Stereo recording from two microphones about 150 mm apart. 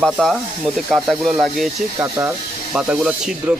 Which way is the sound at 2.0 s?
15° right (ahead or behind).